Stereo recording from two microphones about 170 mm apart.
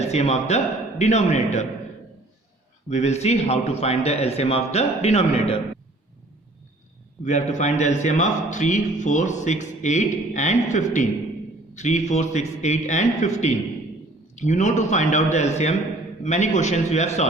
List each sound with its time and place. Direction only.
0.0 s a man's voice: 40° left (ahead or behind)
2.9 s a man's voice: 40° left (ahead or behind)
7.3 s a man's voice: 45° left (ahead or behind)